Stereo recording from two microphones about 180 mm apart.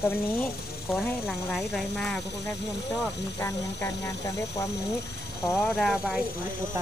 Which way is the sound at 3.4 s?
15° left (ahead or behind).